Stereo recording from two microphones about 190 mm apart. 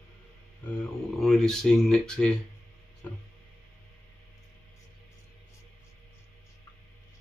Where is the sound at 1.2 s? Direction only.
Centre (ahead or behind).